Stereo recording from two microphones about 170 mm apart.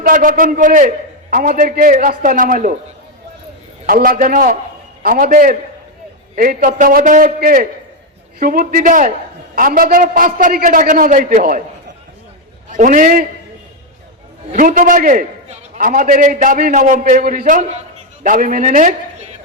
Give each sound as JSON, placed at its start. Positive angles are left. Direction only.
{"t": 0.0, "sound": "a man's voice", "side_deg": -55}
{"t": 3.8, "sound": "a man's voice", "side_deg": -55}
{"t": 12.7, "sound": "a man's voice", "side_deg": -50}
{"t": 14.5, "sound": "a man's voice", "side_deg": -50}
{"t": 17.4, "sound": "a man's voice", "side_deg": -45}